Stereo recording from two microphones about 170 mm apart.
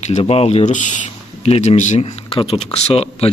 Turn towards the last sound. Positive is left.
turn(degrees=35)  # may be behind; listen again after turning